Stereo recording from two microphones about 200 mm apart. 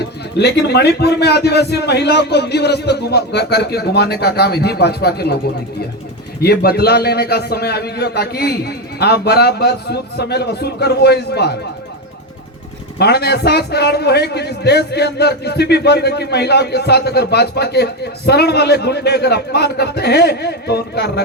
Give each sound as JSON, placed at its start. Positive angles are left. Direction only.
{"t": 0.0, "sound": "a man's voice", "side_deg": 55}
{"t": 6.4, "sound": "a man's voice", "side_deg": 50}
{"t": 13.0, "sound": "a man's voice", "side_deg": 55}